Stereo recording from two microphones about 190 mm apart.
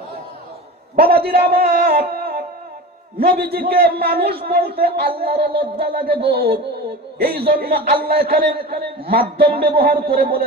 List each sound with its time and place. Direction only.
0.9 s a man's voice: 50° right (ahead or behind)